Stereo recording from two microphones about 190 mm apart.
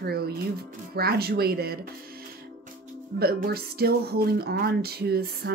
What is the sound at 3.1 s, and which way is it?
Speech, 55° right (ahead or behind).